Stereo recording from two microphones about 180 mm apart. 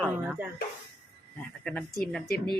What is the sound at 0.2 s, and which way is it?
Speech, 10° right (ahead or behind).